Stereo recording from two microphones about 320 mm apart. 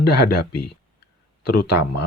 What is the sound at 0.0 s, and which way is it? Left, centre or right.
Speech, left.